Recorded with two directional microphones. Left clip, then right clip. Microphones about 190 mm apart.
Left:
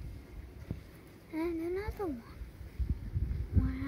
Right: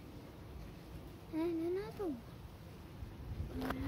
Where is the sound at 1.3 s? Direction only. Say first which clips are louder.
Left 2 dB; 20° left (ahead or behind).